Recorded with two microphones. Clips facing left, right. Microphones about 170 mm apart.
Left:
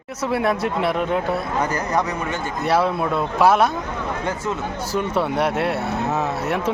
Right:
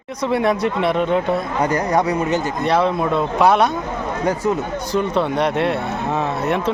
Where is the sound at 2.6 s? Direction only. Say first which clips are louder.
Even; 5° left (ahead or behind).